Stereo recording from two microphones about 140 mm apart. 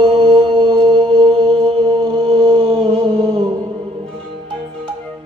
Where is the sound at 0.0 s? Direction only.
40° right (ahead or behind).